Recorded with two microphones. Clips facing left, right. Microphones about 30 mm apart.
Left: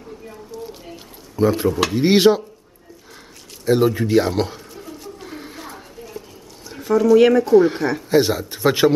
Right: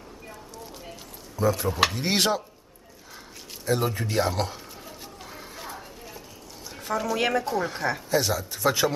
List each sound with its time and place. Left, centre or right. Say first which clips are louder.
1.3 s speech: left 7 dB; left
2.0 s speech: left 10 dB; centre
3.6 s speech: left 9 dB; centre
5.2 s a sound: left 7 dB; centre
5.6 s a sound: left 3 dB; centre
6.8 s speech: left 13 dB; centre
7.5 s speech: left 15 dB; centre
8.1 s speech: left 10 dB; left